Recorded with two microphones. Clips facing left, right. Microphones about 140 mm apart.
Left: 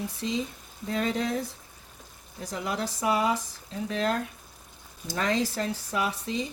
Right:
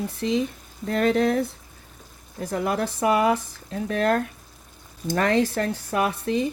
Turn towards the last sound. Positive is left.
turn(degrees=-60)  # may be behind; listen again after turning